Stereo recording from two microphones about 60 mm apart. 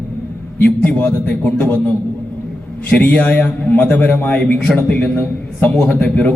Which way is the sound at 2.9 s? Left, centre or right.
Left.